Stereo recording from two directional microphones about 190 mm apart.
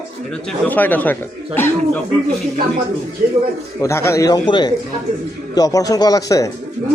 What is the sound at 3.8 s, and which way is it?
Speech, 15° left (ahead or behind).